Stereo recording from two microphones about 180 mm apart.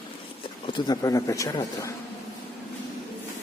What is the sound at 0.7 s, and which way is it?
Speech, 20° left (ahead or behind).